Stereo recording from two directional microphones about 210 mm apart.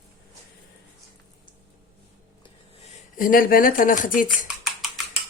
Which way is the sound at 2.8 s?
35° left (ahead or behind).